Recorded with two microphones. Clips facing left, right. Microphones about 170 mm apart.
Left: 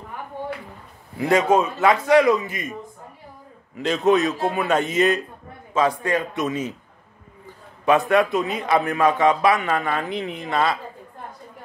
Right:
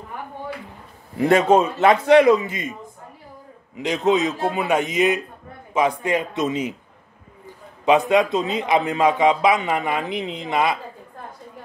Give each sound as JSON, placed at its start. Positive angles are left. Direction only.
{"t": 1.3, "sound": "a man's voice", "side_deg": -25}
{"t": 3.7, "sound": "a man's voice", "side_deg": -15}
{"t": 7.8, "sound": "a man's voice", "side_deg": -15}